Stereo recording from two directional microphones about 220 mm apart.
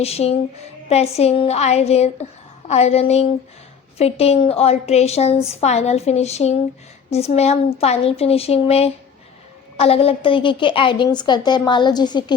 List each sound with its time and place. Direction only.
0.0 s a woman's voice: 30° left (ahead or behind)